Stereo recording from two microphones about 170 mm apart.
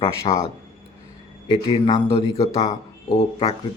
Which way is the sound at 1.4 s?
25° left (ahead or behind).